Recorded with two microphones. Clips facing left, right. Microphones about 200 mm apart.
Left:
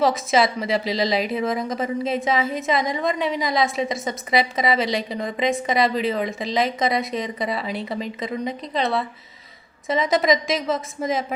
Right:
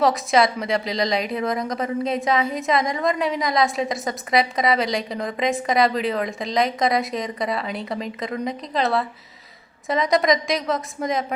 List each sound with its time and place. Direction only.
0.0 s a woman's voice: centre (ahead or behind)